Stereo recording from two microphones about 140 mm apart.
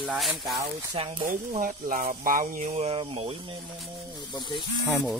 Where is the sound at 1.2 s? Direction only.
75° right (ahead or behind); by 3.4 s 45° right (ahead or behind).